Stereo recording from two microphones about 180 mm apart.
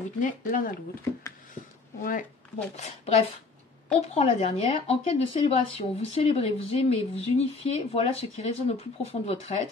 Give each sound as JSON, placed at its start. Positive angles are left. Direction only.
{"t": 0.2, "sound": "speech", "side_deg": 50}
{"t": 2.0, "sound": "speech", "side_deg": 45}